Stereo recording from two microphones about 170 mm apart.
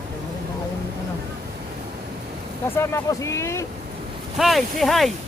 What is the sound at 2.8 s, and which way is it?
Speech, 15° left (ahead or behind).